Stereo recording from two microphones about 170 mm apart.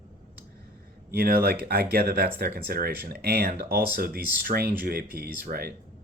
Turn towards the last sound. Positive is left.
turn(degrees=-65)  # may be behind; listen again after turning